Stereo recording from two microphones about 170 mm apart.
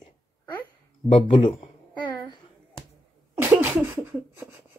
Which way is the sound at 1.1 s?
30° left (ahead or behind).